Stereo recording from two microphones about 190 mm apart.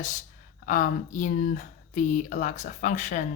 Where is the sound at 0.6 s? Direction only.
45° left (ahead or behind).